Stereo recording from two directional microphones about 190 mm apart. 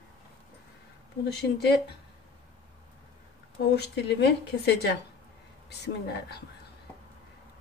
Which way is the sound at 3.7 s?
60° left (ahead or behind).